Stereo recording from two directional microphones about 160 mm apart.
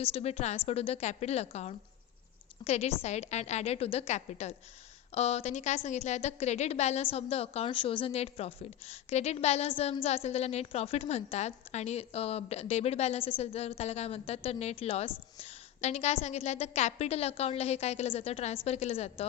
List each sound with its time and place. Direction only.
0.0 s a woman's voice: 40° left (ahead or behind)